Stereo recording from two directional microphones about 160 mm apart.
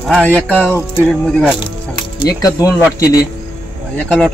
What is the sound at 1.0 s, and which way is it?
Speech, 5° left (ahead or behind).